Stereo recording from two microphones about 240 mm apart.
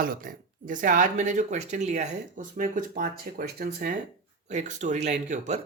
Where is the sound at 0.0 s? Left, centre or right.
Right.